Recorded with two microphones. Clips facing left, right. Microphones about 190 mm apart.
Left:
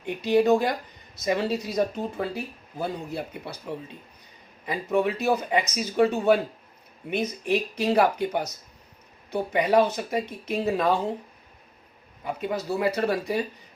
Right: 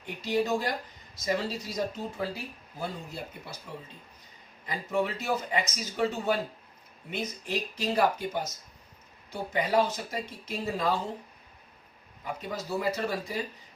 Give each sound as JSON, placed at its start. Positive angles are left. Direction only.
{"t": 0.0, "sound": "speech", "side_deg": 60}
{"t": 4.6, "sound": "speech", "side_deg": 60}
{"t": 12.4, "sound": "speech", "side_deg": 60}